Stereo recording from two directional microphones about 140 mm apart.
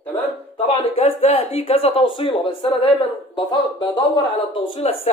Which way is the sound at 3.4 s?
30° left (ahead or behind).